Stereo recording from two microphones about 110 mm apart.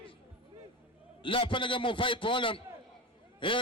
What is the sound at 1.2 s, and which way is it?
Speech, 50° left (ahead or behind).